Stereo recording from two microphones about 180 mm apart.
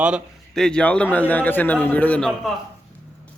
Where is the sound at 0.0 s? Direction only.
Centre (ahead or behind).